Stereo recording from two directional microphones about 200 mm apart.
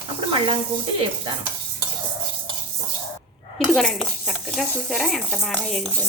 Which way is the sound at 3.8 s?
Centre (ahead or behind).